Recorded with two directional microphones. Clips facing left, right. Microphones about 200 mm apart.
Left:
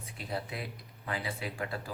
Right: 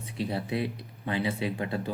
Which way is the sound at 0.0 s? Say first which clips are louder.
Right 6 dB; 25° right (ahead or behind).